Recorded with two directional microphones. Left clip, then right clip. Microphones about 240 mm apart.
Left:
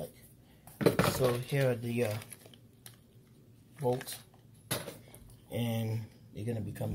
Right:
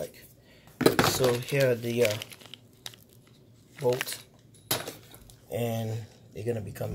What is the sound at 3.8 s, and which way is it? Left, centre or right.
Speech, right.